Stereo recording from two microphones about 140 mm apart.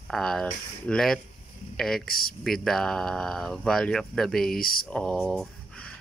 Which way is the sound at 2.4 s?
Centre (ahead or behind).